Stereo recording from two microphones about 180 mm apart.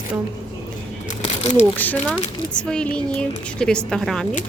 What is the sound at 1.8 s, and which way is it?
Speech, 10° left (ahead or behind).